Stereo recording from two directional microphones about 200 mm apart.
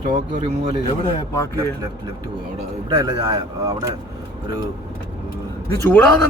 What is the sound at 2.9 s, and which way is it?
Speech, 20° right (ahead or behind).